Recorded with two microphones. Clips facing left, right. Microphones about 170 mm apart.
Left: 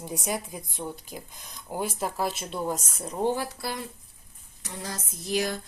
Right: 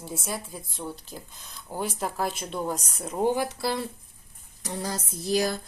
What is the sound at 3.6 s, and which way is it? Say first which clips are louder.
Speech: right 5 dB; 30° right (ahead or behind).